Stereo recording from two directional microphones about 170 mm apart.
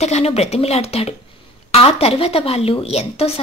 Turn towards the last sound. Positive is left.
turn(degrees=35)  # may be behind; listen again after turning